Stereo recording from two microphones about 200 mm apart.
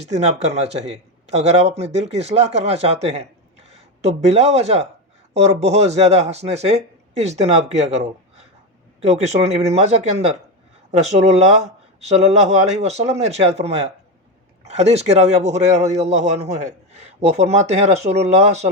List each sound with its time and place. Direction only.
0.1 s speech: 35° right (ahead or behind)